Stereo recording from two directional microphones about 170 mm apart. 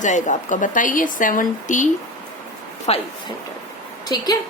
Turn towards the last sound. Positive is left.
turn(degrees=25)  # may be behind; listen again after turning